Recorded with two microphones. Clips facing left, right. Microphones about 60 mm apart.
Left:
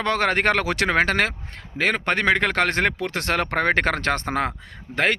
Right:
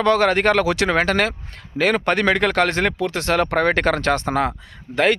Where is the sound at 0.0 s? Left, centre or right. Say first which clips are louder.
Right 4 dB; left.